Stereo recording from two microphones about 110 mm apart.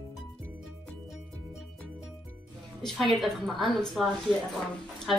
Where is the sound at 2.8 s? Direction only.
5° left (ahead or behind).